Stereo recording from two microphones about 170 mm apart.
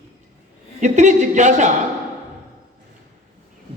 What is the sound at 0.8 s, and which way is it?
Speech, 45° right (ahead or behind).